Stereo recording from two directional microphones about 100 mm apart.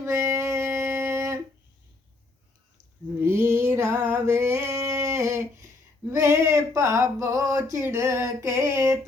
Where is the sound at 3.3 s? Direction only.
25° right (ahead or behind).